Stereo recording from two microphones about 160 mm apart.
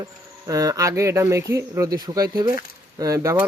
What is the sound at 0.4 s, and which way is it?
Speech, 20° right (ahead or behind).